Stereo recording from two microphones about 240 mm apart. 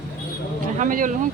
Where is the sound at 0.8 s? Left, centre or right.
Right.